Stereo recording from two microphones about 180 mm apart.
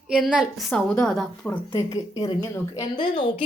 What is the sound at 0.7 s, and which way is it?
Speech, 5° left (ahead or behind).